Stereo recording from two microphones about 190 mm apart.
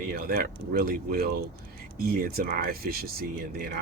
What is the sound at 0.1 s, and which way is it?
Speech, 50° right (ahead or behind).